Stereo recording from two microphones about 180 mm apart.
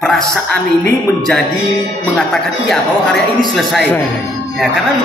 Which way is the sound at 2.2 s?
5° left (ahead or behind).